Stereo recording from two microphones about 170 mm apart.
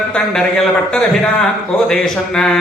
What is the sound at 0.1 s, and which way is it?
Speech, 5° left (ahead or behind).